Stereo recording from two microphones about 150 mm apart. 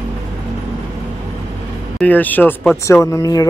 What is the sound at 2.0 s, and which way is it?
Speech, 10° left (ahead or behind).